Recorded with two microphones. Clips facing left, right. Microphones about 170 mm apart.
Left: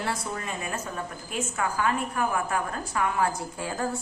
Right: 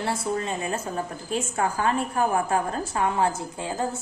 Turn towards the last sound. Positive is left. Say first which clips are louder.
# right 2 dB
turn(degrees=-25)  # may be behind; listen again after turning